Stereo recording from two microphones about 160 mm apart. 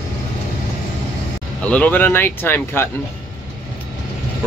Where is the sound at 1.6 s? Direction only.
10° left (ahead or behind).